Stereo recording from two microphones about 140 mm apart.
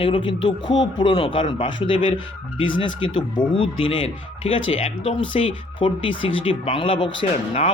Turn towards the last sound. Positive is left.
turn(degrees=45)  # may be behind; listen again after turning